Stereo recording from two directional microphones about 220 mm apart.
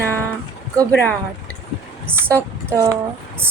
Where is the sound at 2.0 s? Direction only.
10° right (ahead or behind).